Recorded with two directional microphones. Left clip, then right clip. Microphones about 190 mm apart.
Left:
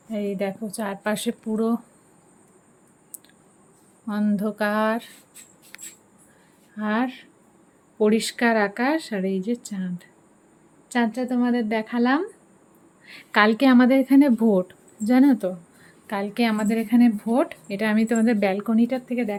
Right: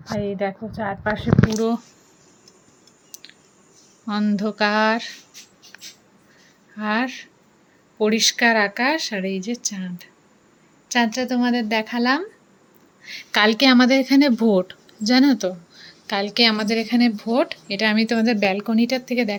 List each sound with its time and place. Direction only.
0.2 s a woman's voice: 20° left (ahead or behind)
1.5 s speech: 10° left (ahead or behind)
4.0 s speech: centre (ahead or behind)
6.7 s speech: 5° left (ahead or behind)
10.9 s speech: centre (ahead or behind)